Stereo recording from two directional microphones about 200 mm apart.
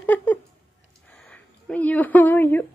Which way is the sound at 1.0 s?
5° left (ahead or behind).